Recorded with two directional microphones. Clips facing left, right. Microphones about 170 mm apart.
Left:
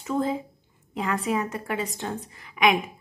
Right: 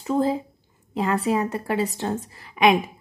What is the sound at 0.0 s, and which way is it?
A woman's voice, 35° right (ahead or behind).